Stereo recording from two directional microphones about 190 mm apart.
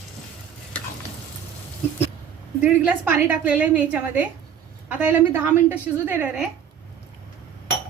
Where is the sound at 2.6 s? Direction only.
10° right (ahead or behind).